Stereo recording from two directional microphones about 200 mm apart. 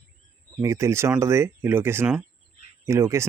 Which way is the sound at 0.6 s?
15° right (ahead or behind).